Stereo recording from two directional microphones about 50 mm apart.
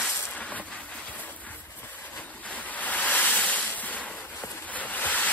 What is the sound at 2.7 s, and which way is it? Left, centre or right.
Boat, left.